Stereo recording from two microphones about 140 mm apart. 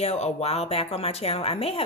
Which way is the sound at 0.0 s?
50° left (ahead or behind).